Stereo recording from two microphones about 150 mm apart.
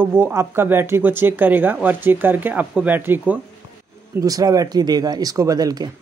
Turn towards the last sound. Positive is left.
turn(degrees=-25)  # may be behind; listen again after turning